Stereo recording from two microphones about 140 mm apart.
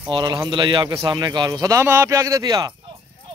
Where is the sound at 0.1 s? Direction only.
30° right (ahead or behind).